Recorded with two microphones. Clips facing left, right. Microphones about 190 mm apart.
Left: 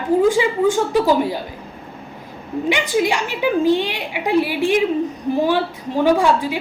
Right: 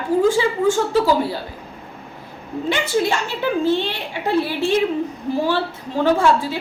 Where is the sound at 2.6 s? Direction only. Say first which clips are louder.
Left 1 dB; 15° left (ahead or behind).